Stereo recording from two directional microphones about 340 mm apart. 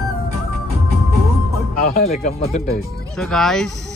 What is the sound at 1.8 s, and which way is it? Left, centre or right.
Speech, left.